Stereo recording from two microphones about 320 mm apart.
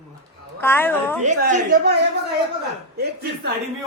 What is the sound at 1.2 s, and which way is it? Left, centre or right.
Speech, right.